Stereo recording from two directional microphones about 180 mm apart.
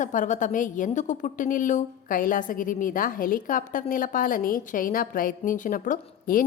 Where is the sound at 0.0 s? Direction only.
45° left (ahead or behind).